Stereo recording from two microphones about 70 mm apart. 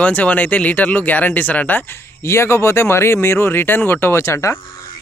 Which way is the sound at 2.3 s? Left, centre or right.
Left.